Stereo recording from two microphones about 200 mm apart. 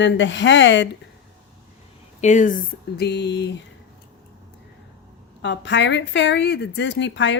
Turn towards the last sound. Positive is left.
turn(degrees=65)  # may be behind; listen again after turning